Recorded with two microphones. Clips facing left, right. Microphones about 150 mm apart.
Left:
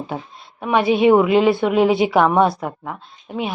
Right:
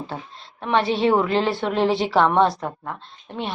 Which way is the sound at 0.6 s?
10° left (ahead or behind).